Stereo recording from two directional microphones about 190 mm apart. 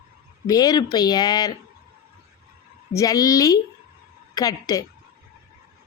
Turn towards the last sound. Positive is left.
turn(degrees=20)  # may be behind; listen again after turning